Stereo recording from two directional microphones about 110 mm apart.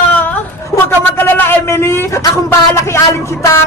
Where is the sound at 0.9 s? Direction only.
20° left (ahead or behind).